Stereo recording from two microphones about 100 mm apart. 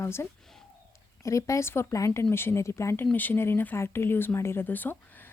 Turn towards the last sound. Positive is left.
turn(degrees=20)  # may be behind; listen again after turning